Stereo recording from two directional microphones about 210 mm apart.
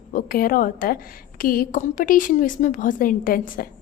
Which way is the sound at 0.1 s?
40° left (ahead or behind).